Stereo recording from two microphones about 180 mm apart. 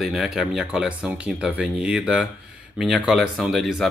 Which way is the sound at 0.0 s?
Centre (ahead or behind).